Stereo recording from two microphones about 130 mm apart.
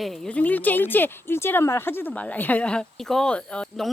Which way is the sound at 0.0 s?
10° left (ahead or behind).